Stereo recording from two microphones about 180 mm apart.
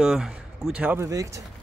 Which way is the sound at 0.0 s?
5° right (ahead or behind).